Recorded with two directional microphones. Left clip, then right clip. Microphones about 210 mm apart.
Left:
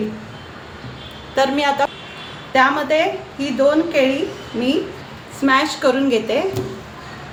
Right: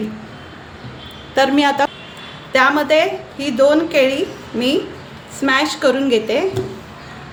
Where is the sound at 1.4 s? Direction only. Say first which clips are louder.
Right 2 dB; 30° right (ahead or behind).